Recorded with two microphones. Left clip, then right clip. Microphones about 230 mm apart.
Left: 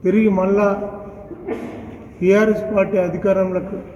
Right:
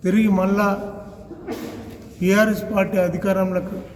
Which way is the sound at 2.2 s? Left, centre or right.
Right.